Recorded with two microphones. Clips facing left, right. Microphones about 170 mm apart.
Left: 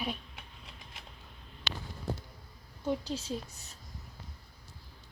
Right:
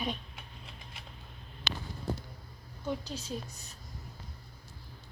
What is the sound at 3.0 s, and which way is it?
Speech, 30° left (ahead or behind).